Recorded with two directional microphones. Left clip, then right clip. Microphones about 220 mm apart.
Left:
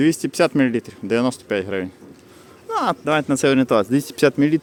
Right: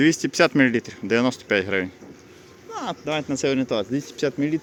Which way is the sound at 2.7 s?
40° left (ahead or behind).